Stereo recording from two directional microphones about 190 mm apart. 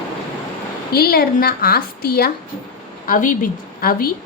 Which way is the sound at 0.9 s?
55° left (ahead or behind).